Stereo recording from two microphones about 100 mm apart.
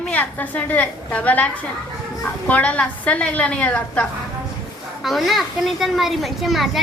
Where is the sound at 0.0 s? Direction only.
15° left (ahead or behind).